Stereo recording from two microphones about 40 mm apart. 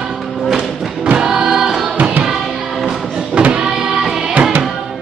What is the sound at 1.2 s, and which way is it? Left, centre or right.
Choir, centre.